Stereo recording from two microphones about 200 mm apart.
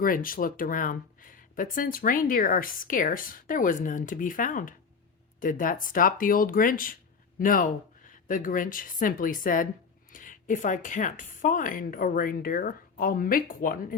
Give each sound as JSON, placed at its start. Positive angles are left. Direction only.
{"t": 0.0, "sound": "speech", "side_deg": 45}